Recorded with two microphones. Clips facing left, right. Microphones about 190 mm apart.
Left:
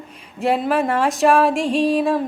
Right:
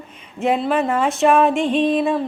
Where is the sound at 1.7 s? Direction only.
35° left (ahead or behind).